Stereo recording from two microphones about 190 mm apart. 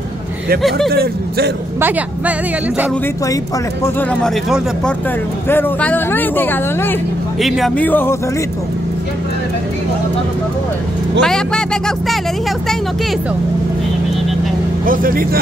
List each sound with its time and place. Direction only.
0.6 s speech: centre (ahead or behind)
0.8 s speech: 55° right (ahead or behind)
1.8 s speech: 10° right (ahead or behind)
3.8 s speech: 5° left (ahead or behind)
7.3 s speech: centre (ahead or behind)
11.2 s speech: 5° left (ahead or behind)
14.9 s speech: 50° right (ahead or behind)